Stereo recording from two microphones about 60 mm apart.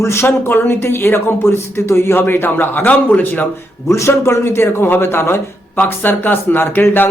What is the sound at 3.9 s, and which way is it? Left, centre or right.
Speech, left.